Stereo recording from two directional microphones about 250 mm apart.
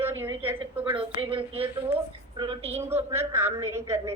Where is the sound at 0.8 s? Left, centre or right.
Right.